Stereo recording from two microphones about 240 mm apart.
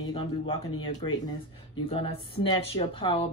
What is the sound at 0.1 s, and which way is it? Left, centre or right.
Speech, left.